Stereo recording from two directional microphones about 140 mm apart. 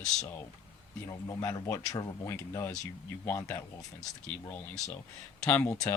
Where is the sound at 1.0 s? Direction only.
25° left (ahead or behind).